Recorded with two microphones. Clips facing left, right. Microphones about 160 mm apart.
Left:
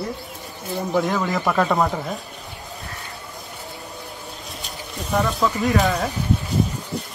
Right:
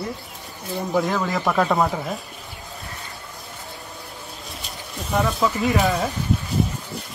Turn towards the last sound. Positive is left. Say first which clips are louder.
# left 1 dB
turn(degrees=0)  # may be behind; listen again after turning